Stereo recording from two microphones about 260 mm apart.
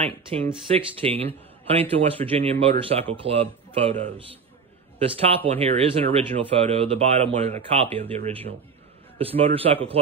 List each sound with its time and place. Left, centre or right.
0.0 s a man's voice: right